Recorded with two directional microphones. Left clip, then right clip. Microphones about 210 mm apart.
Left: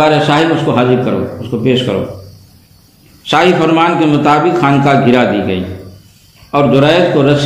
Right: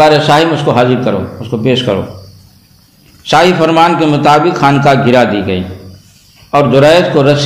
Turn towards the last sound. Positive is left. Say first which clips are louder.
# right 2 dB
turn(degrees=-40)  # may be behind; listen again after turning